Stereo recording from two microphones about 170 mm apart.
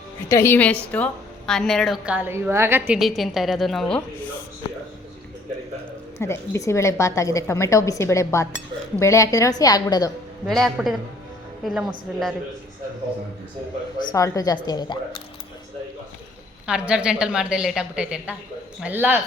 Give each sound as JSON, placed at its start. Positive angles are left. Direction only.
{"t": 0.3, "sound": "a woman's voice", "side_deg": 15}
{"t": 2.1, "sound": "a woman's voice", "side_deg": -10}
{"t": 3.0, "sound": "a woman's voice", "side_deg": 0}
{"t": 6.1, "sound": "a woman's voice", "side_deg": 15}
{"t": 10.4, "sound": "a woman's voice", "side_deg": 0}
{"t": 14.1, "sound": "a woman's voice", "side_deg": 20}
{"t": 16.6, "sound": "a woman's voice", "side_deg": -5}